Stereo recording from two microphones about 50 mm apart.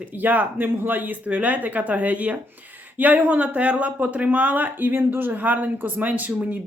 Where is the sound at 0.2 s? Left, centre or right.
Right.